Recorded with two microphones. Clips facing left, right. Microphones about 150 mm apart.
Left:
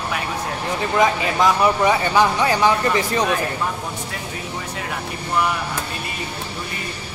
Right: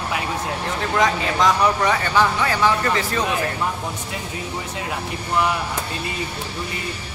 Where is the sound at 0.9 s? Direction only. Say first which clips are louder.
Left 2 dB; 5° left (ahead or behind).